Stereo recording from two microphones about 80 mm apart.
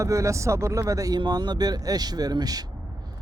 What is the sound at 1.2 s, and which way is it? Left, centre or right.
Speech, right.